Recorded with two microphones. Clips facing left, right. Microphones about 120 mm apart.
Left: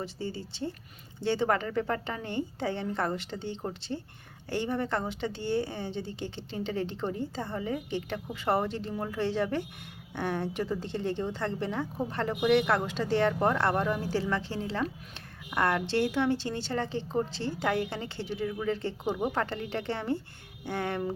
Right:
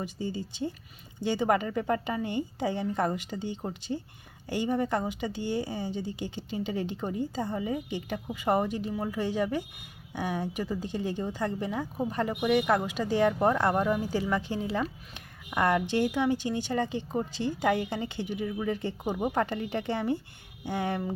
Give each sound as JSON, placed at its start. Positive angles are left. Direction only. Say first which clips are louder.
{"t": 0.0, "sound": "speech", "louder": "right 2 dB", "side_deg": -15}